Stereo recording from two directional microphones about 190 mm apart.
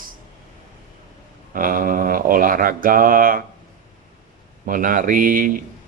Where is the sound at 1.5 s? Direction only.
45° right (ahead or behind).